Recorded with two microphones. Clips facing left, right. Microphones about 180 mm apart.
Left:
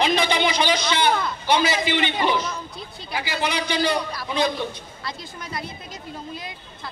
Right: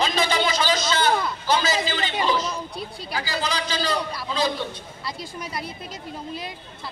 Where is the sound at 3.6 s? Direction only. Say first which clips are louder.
Left 3 dB; 20° left (ahead or behind).